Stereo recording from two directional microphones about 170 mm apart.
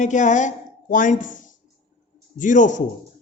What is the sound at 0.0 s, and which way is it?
A woman's voice, 45° left (ahead or behind).